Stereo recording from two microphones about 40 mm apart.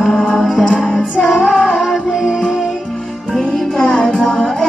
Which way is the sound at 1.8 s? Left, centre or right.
Centre.